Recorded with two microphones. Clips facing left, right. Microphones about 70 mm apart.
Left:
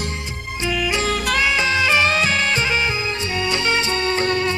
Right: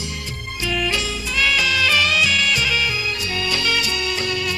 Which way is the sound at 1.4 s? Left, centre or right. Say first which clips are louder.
Right 2 dB; left.